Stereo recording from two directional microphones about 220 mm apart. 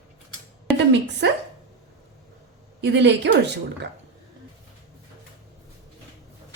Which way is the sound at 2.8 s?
50° right (ahead or behind).